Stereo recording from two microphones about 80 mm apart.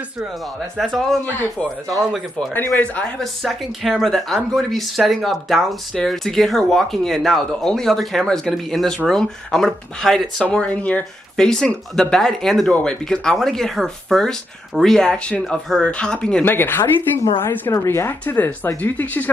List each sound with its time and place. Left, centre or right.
0.7 s speech: centre
1.2 s speech: left
3.4 s speech: centre
10.4 s speech: centre
16.4 s speech: left